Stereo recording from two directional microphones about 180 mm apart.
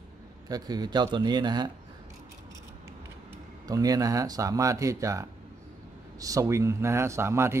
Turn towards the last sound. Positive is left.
turn(degrees=-15)  # may be behind; listen again after turning